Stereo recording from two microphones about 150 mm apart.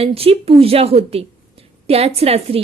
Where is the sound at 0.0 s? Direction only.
40° right (ahead or behind).